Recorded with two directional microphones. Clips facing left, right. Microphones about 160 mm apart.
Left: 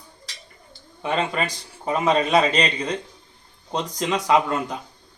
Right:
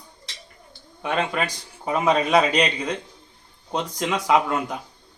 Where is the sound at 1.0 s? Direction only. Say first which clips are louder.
Even; 5° right (ahead or behind).